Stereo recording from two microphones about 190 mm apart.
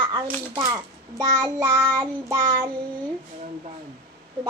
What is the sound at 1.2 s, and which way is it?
Child singing, 15° right (ahead or behind).